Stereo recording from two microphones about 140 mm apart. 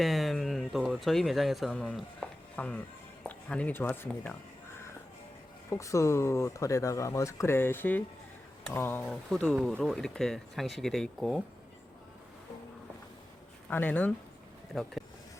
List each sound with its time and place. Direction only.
0.0 s a sound: centre (ahead or behind)
3.2 s speech: 10° left (ahead or behind)
5.7 s speech: 20° left (ahead or behind); by 11.4 s 5° left (ahead or behind)
13.7 s speech: 15° left (ahead or behind)
14.7 s speech: centre (ahead or behind)